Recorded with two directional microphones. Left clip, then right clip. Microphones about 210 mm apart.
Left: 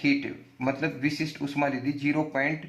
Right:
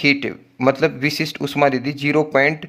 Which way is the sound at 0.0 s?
50° right (ahead or behind).